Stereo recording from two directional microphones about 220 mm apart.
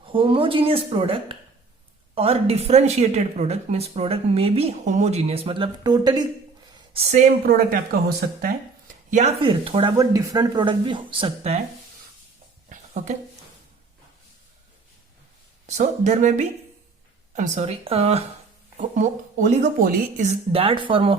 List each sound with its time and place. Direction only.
0.0 s a woman's voice: 25° right (ahead or behind)
6.7 s speech: 30° right (ahead or behind)
9.0 s a woman's voice: 30° right (ahead or behind)
12.6 s a sound: 35° right (ahead or behind)
15.6 s a woman's voice: 30° right (ahead or behind)